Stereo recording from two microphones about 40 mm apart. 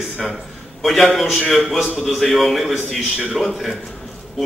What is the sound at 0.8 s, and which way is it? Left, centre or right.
A man's voice, centre.